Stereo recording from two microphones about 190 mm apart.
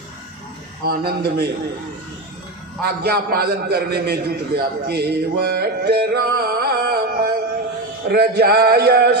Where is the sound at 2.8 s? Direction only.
55° right (ahead or behind).